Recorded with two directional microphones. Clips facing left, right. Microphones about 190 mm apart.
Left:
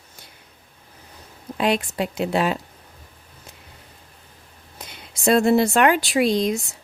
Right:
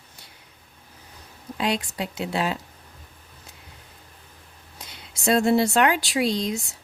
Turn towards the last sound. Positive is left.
turn(degrees=55)  # may be behind; listen again after turning